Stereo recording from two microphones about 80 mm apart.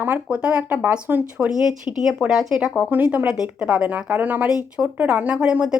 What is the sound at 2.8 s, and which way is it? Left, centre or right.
A woman's voice, centre.